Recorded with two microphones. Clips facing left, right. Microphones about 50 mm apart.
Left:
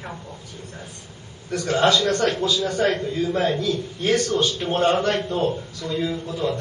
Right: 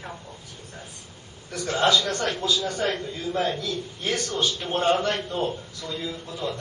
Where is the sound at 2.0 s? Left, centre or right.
Centre.